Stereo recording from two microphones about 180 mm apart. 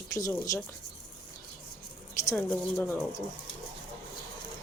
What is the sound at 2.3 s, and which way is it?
Speech, 10° left (ahead or behind).